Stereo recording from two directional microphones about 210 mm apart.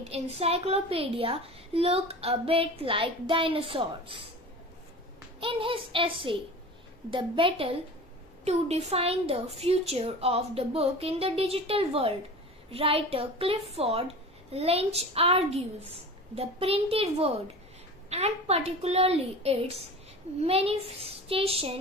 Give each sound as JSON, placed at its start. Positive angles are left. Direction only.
{"t": 0.1, "sound": "a woman's voice", "side_deg": -30}
{"t": 5.4, "sound": "a woman's voice", "side_deg": -25}